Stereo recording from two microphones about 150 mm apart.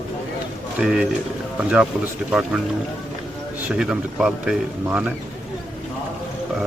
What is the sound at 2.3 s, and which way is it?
Speech, 5° right (ahead or behind).